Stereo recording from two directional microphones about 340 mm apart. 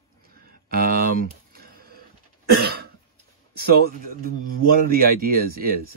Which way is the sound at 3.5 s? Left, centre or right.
Right.